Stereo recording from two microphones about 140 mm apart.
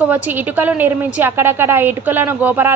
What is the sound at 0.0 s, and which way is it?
A woman's voice, 10° right (ahead or behind).